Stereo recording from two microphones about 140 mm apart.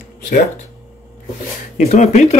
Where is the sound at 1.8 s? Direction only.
55° left (ahead or behind).